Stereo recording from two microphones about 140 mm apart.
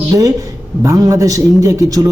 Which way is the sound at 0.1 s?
25° right (ahead or behind).